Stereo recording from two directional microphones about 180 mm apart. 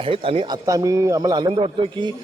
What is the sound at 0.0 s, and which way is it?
A man's voice, 30° right (ahead or behind).